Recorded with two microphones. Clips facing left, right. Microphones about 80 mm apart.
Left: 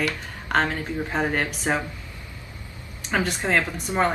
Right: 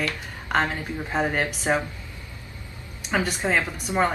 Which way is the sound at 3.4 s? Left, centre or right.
Centre.